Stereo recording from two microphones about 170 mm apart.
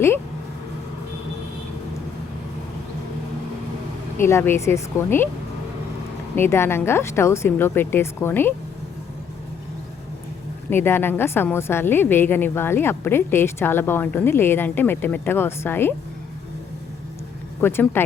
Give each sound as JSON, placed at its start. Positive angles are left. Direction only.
{"t": 4.2, "sound": "a woman's voice", "side_deg": 15}
{"t": 6.3, "sound": "a woman's voice", "side_deg": 15}
{"t": 10.7, "sound": "a woman's voice", "side_deg": 15}
{"t": 17.6, "sound": "a woman's voice", "side_deg": 15}